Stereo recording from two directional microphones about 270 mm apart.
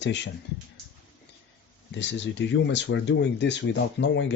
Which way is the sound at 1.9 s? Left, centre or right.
Left.